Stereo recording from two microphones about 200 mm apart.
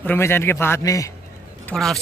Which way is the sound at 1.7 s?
Centre (ahead or behind).